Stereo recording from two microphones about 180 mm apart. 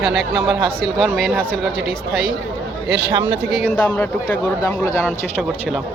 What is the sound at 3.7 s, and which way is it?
Speech, 10° left (ahead or behind).